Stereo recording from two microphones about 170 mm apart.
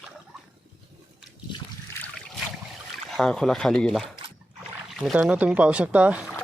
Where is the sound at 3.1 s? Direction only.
5° left (ahead or behind).